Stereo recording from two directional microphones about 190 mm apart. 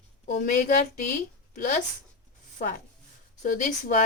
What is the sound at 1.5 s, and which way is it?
Speech, 45° left (ahead or behind).